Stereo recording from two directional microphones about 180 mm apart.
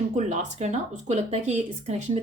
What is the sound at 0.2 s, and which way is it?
Speech, 40° right (ahead or behind).